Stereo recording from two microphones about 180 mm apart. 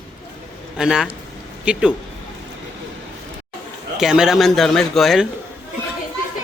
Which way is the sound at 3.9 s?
5° right (ahead or behind).